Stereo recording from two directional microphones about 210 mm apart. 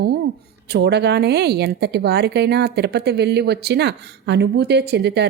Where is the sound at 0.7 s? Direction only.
50° right (ahead or behind).